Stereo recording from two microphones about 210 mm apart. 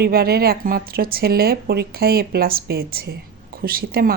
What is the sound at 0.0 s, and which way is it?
Speech, 45° right (ahead or behind).